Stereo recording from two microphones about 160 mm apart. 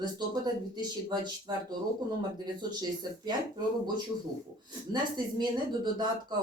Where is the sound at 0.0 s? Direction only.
25° right (ahead or behind).